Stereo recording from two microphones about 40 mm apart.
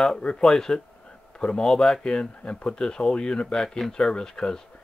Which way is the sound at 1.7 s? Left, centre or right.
Centre.